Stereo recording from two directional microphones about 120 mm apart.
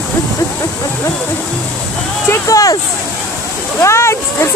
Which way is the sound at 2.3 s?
30° left (ahead or behind).